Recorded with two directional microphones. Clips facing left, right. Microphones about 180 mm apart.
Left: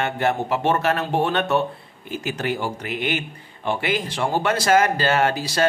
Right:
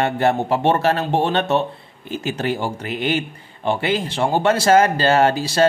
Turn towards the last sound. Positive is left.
turn(degrees=-30)  # may be behind; listen again after turning